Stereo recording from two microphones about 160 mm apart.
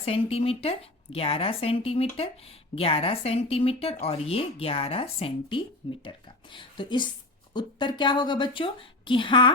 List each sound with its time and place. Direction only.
0.0 s a woman's voice: 35° left (ahead or behind)